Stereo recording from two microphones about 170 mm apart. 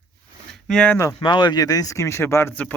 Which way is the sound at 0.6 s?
5° left (ahead or behind).